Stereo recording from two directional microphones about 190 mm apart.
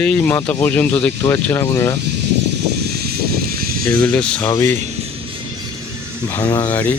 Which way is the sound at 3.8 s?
5° left (ahead or behind).